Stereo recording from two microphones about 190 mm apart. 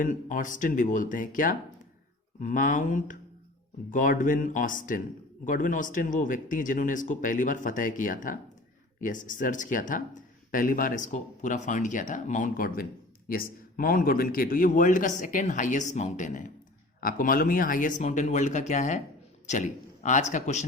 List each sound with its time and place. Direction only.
0.0 s a man's voice: 45° left (ahead or behind)